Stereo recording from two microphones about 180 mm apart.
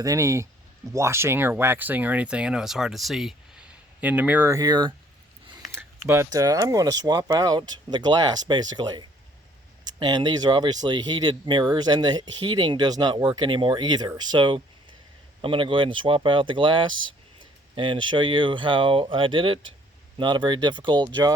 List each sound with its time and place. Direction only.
0.0 s speech: 15° right (ahead or behind)